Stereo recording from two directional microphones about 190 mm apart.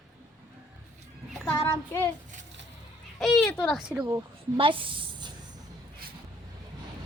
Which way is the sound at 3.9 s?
15° right (ahead or behind).